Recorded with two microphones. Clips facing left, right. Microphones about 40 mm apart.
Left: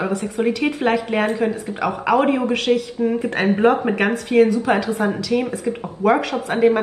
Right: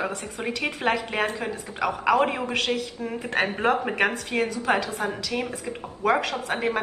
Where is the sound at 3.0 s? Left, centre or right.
Centre.